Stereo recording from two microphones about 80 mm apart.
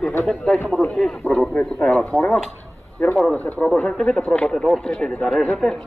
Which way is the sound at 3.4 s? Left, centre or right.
Left.